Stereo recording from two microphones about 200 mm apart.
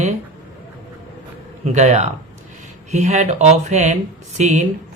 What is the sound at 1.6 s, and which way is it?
Speech, 35° right (ahead or behind).